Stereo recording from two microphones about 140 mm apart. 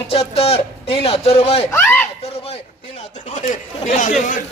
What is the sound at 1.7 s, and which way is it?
Speech, 15° left (ahead or behind).